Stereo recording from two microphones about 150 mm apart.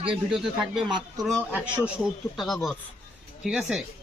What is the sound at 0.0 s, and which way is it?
Speech, 40° right (ahead or behind).